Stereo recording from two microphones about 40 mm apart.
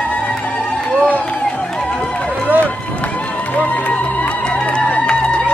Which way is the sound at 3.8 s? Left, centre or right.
Left.